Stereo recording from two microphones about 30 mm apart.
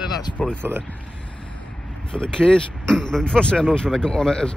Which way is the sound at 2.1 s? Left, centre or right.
Left.